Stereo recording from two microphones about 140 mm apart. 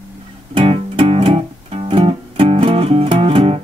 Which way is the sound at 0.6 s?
45° right (ahead or behind).